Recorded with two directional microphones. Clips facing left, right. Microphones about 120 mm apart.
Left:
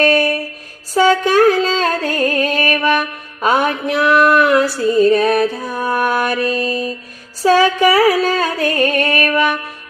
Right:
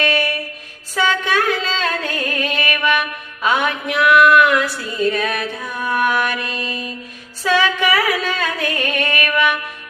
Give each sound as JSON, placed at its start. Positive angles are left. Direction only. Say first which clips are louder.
{"t": 0.0, "sound": "music", "louder": "left 6 dB", "side_deg": 40}